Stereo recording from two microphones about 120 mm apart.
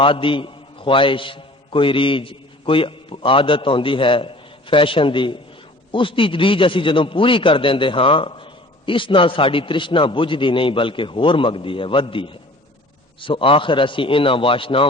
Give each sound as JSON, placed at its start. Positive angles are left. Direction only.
{"t": 0.0, "sound": "a man's voice", "side_deg": 45}